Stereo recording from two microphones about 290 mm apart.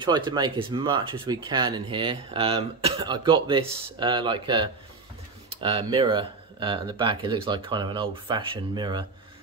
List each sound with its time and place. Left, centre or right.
0.0 s speech: centre